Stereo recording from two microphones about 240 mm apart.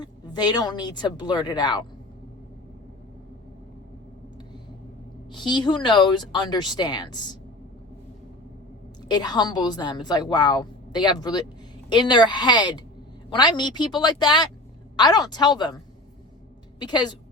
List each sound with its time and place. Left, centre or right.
0.0 s a woman's voice: centre
5.3 s a woman's voice: centre
9.0 s a woman's voice: centre
16.8 s a woman's voice: centre